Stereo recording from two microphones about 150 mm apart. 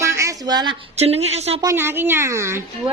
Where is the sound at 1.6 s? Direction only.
20° right (ahead or behind).